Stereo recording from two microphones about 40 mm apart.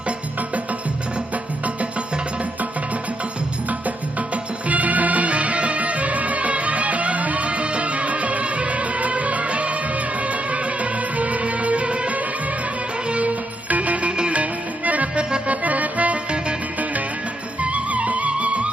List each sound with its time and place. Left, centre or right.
4.7 s music: right
15.1 s accordion: right
15.4 s accordion: right
17.6 s music: right